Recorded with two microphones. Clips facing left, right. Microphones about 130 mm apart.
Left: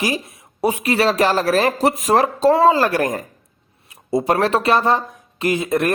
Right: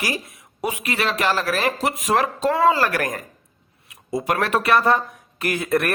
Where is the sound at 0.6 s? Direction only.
35° left (ahead or behind).